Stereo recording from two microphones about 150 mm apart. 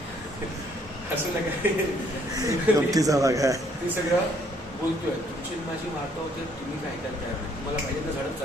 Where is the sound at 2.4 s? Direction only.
25° right (ahead or behind).